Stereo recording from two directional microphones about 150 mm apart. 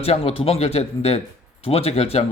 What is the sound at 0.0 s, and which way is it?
Speech, 40° left (ahead or behind).